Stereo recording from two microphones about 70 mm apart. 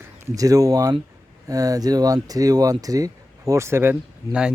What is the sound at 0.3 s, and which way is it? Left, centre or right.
Speech, right.